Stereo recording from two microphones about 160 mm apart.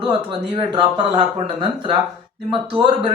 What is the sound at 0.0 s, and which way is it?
Speech, 30° right (ahead or behind).